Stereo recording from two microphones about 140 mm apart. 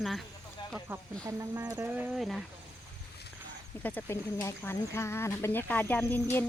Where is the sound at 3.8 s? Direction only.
10° left (ahead or behind).